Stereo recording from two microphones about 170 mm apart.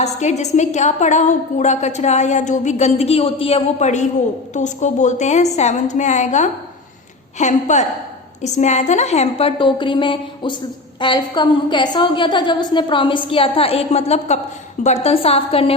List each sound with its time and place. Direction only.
0.0 s a woman's voice: 40° left (ahead or behind)